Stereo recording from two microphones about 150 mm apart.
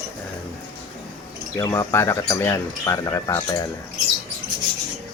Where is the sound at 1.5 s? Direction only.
20° left (ahead or behind).